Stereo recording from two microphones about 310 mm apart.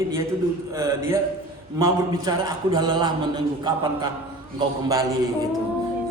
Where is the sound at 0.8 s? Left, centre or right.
Centre.